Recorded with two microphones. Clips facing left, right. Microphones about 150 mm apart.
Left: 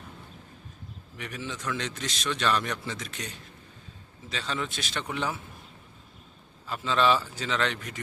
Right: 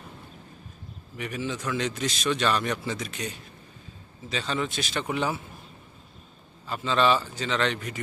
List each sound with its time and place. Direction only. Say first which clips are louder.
1.1 s a man's voice: right 6 dB; 5° right (ahead or behind)
6.7 s a man's voice: right 1 dB; centre (ahead or behind)